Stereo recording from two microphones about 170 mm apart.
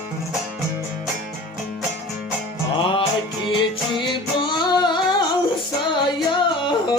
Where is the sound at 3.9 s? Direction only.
30° left (ahead or behind).